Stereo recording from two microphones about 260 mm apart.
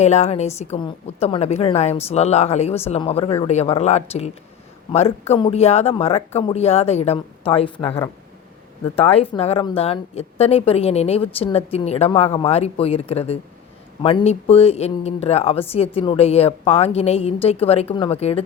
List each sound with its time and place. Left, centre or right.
0.0 s speech: left
9.0 s speech: left